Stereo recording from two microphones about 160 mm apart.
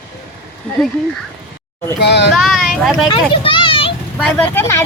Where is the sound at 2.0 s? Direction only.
90° left.